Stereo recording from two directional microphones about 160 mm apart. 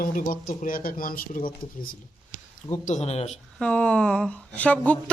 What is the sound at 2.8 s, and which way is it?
Speech, 45° left (ahead or behind).